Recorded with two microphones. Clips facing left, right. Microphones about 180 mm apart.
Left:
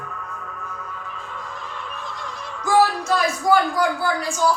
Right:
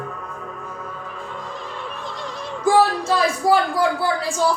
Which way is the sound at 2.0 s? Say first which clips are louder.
Right 3 dB; 30° right (ahead or behind).